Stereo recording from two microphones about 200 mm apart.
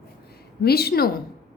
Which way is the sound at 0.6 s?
50° left (ahead or behind).